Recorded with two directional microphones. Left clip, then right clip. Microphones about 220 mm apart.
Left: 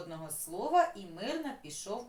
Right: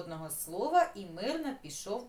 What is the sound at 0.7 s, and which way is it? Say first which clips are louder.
Speech: even; 10° right (ahead or behind).